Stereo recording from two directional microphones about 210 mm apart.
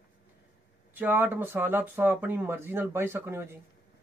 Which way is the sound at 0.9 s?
10° right (ahead or behind).